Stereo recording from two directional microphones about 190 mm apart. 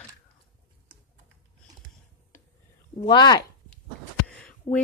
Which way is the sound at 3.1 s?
20° left (ahead or behind).